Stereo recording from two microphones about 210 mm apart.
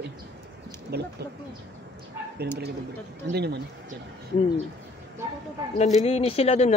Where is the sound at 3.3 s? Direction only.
50° right (ahead or behind).